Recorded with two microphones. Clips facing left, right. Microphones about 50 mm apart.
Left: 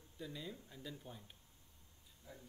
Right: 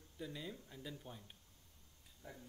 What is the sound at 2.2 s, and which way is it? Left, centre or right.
Speech, right.